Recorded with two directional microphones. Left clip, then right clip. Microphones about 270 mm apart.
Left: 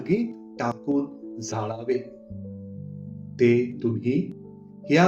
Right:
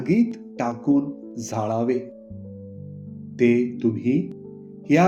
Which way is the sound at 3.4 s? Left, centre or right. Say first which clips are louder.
Right 1 dB; right.